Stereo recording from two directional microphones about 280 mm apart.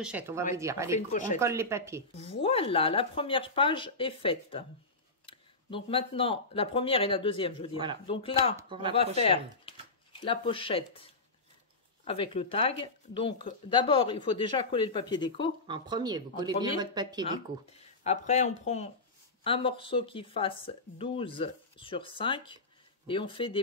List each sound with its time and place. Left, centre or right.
0.0 s speech: centre
2.2 s speech: centre
8.5 s speech: centre
9.2 s speech: centre
12.0 s speech: centre
15.6 s speech: centre
18.0 s speech: left